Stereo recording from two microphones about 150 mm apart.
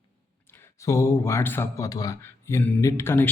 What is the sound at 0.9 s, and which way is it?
Speech, 20° left (ahead or behind).